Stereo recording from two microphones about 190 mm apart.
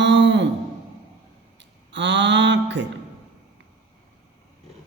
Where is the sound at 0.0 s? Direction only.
70° right (ahead or behind).